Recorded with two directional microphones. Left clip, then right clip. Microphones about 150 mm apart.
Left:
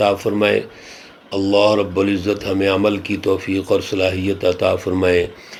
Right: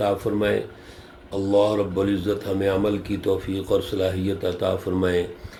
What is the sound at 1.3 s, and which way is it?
Mantra, 40° left (ahead or behind).